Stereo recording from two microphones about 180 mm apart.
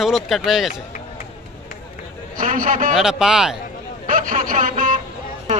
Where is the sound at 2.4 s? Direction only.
45° right (ahead or behind).